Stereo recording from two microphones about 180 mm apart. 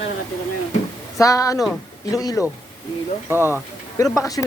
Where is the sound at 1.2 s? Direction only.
20° left (ahead or behind).